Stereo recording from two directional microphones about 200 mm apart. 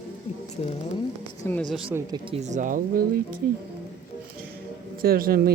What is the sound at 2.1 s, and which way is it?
Speech, 25° right (ahead or behind).